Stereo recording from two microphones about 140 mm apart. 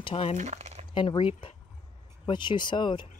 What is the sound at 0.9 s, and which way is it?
Speech, 40° left (ahead or behind).